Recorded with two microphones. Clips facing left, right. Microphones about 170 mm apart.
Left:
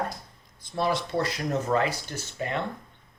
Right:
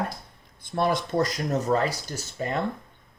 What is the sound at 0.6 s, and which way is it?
Speech, 55° right (ahead or behind).